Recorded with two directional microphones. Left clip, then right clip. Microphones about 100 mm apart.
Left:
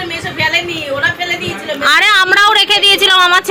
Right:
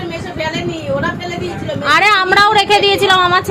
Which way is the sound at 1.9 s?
Centre (ahead or behind).